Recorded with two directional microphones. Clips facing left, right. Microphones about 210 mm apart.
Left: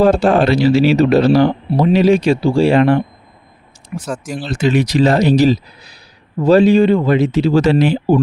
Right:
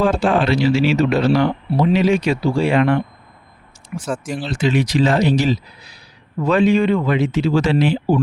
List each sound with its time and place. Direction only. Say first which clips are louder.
0.0 s speech: left 5 dB; 40° left (ahead or behind)